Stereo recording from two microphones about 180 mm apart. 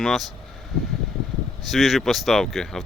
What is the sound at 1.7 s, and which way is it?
Speech, centre (ahead or behind).